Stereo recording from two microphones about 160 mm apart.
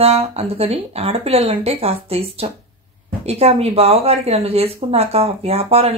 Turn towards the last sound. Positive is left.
turn(degrees=-40)  # may be behind; listen again after turning